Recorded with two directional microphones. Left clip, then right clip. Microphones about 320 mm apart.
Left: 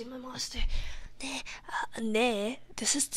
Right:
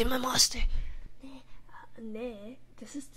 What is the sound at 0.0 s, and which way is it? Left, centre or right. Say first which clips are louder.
Speech: right 12 dB; right.